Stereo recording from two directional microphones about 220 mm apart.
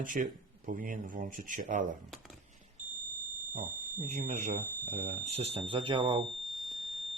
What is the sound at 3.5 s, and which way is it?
Speech, 35° right (ahead or behind).